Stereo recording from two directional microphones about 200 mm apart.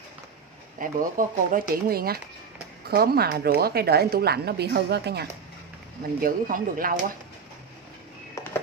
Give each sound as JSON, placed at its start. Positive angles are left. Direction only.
{"t": 0.7, "sound": "speech", "side_deg": -45}